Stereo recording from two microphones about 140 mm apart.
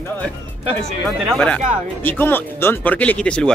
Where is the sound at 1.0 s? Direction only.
5° left (ahead or behind).